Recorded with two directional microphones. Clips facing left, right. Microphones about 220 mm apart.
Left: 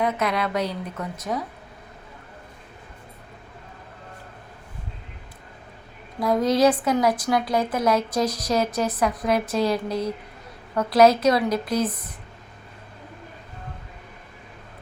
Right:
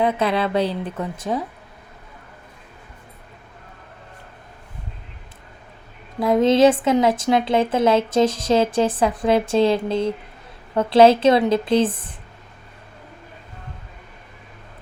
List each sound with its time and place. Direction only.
0.0 s a woman's voice: 30° right (ahead or behind)
6.1 s a woman's voice: 25° right (ahead or behind)